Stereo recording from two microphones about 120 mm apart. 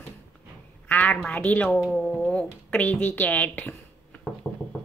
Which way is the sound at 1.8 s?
Centre (ahead or behind).